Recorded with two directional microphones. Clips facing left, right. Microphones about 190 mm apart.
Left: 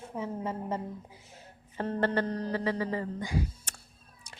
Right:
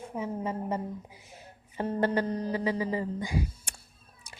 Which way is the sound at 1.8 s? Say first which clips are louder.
Right 1 dB; 10° right (ahead or behind).